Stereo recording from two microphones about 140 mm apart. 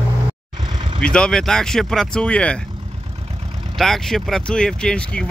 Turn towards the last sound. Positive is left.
turn(degrees=5)  # may be behind; listen again after turning